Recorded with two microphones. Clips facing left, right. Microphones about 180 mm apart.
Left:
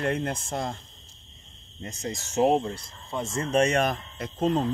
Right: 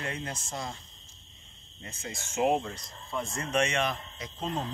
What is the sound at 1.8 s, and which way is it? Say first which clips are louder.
Speech: left 7 dB; 40° left (ahead or behind).